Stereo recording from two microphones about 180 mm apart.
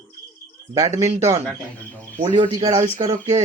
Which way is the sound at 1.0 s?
35° right (ahead or behind).